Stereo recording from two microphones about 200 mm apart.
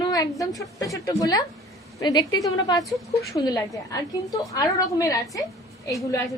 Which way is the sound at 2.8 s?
Centre (ahead or behind).